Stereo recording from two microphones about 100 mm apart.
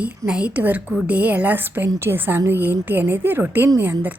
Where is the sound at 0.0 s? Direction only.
10° right (ahead or behind).